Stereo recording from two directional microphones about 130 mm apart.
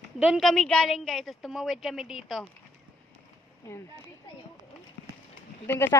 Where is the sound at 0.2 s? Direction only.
Centre (ahead or behind).